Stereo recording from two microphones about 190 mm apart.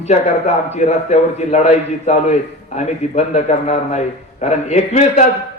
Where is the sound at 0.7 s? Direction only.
35° left (ahead or behind).